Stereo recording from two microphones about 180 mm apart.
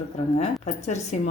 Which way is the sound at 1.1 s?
40° left (ahead or behind).